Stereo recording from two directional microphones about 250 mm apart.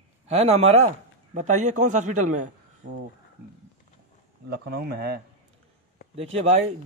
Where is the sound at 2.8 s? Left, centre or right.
Right.